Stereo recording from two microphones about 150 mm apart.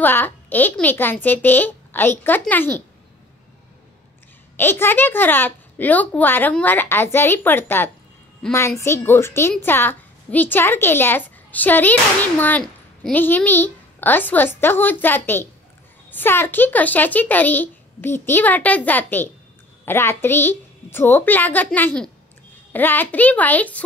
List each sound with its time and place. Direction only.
0.0 s a woman's voice: 15° left (ahead or behind)
4.6 s a woman's voice: 15° left (ahead or behind)